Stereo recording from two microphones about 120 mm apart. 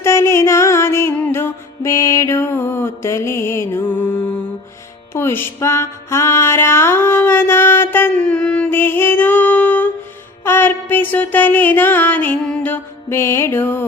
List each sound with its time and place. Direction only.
0.0 s music: 20° left (ahead or behind)